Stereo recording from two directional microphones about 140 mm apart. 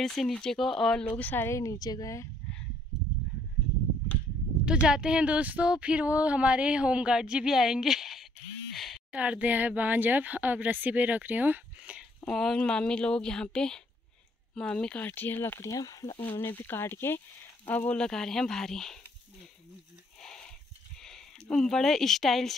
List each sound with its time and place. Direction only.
0.0 s speech: 5° left (ahead or behind)
1.1 s a woman's voice: 15° left (ahead or behind)
4.8 s speech: 5° right (ahead or behind)
8.7 s a sound: centre (ahead or behind)
9.1 s speech: 10° right (ahead or behind)
12.3 s speech: 5° left (ahead or behind); by 16.2 s 25° left (ahead or behind)
16.2 s speech: 15° left (ahead or behind)
20.2 s a sound: 5° left (ahead or behind)
21.0 s speech: 5° left (ahead or behind)